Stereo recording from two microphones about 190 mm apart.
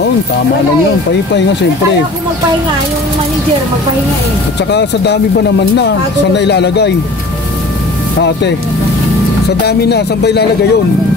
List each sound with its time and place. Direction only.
4.6 s speech: 60° left (ahead or behind)
8.2 s speech: 65° left (ahead or behind)
9.7 s speech: 60° left (ahead or behind)